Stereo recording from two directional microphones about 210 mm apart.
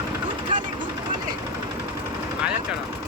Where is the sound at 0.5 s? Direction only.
40° right (ahead or behind).